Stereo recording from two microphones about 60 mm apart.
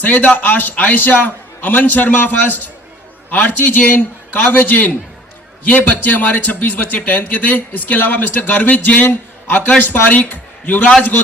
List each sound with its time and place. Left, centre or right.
0.0 s a man's voice: left